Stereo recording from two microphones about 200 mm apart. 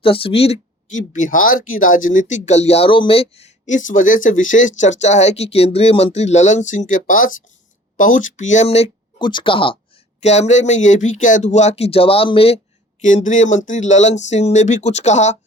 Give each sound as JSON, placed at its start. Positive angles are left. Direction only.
{"t": 0.0, "sound": "speech", "side_deg": 25}
{"t": 13.0, "sound": "speech", "side_deg": 40}